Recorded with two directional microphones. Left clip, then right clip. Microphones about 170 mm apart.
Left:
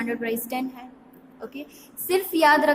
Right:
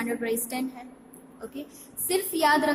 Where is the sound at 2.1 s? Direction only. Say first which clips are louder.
Left 4 dB; 20° left (ahead or behind).